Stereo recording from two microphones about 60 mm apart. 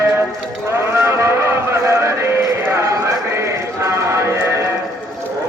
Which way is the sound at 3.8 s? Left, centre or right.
Right.